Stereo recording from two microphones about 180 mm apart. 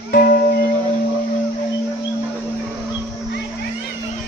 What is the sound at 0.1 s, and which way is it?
Music, 50° left (ahead or behind).